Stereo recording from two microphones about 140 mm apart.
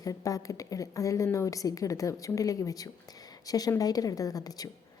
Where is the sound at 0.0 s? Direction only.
25° left (ahead or behind).